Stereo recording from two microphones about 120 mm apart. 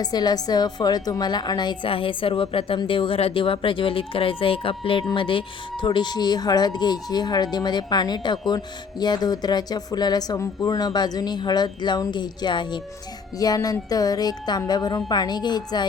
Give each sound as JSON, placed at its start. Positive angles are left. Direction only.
{"t": 0.0, "sound": "a woman's voice", "side_deg": 35}